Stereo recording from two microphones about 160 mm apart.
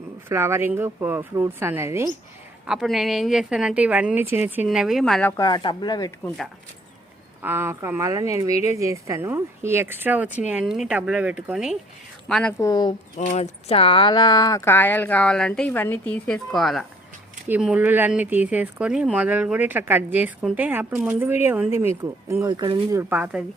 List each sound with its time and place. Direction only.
0.3 s speech: 15° right (ahead or behind)
2.6 s a woman's voice: centre (ahead or behind)
5.4 s speech: 25° left (ahead or behind)
6.2 s a woman's voice: centre (ahead or behind)
7.4 s a woman's voice: 15° right (ahead or behind); by 12.5 s 5° left (ahead or behind)
12.5 s speech: 25° left (ahead or behind)
13.1 s speech: 40° left (ahead or behind); by 23.4 s 10° right (ahead or behind)